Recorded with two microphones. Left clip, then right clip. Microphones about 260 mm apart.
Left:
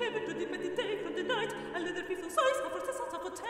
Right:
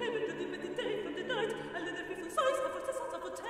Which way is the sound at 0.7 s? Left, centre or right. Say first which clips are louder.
Even; left.